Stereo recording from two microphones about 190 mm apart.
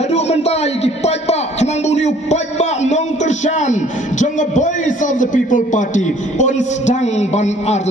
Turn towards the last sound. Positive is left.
turn(degrees=35)  # may be behind; listen again after turning